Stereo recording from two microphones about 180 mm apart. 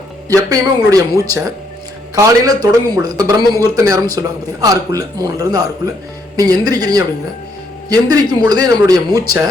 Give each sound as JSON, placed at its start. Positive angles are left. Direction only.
{"t": 0.3, "sound": "a man's voice", "side_deg": -20}